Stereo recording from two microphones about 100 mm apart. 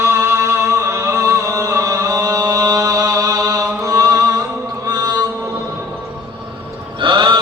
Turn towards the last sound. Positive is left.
turn(degrees=-55)  # may be behind; listen again after turning